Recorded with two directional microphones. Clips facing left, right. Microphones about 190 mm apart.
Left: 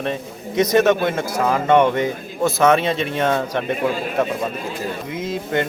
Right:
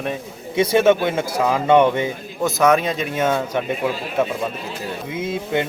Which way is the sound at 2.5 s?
Centre (ahead or behind).